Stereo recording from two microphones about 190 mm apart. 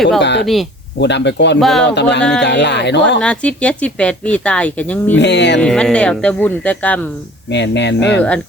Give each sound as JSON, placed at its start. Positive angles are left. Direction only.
{"t": 0.2, "sound": "speech", "side_deg": 65}
{"t": 1.5, "sound": "speech", "side_deg": 0}
{"t": 1.8, "sound": "speech", "side_deg": 65}
{"t": 3.2, "sound": "speech", "side_deg": 5}
{"t": 5.1, "sound": "speech", "side_deg": 65}
{"t": 5.5, "sound": "speech", "side_deg": 5}
{"t": 7.5, "sound": "speech", "side_deg": 65}